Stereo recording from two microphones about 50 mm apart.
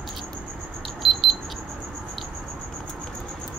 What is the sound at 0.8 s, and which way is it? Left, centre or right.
Alarm clock, centre.